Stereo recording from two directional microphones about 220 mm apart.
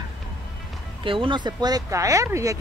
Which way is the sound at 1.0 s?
20° right (ahead or behind).